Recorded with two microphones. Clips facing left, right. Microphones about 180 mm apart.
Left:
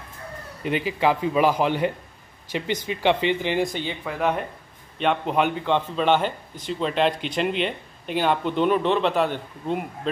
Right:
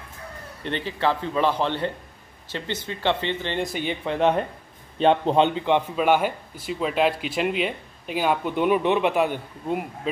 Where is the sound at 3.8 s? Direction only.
25° right (ahead or behind).